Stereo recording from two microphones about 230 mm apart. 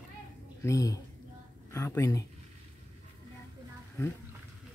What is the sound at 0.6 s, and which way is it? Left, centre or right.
Speech, centre.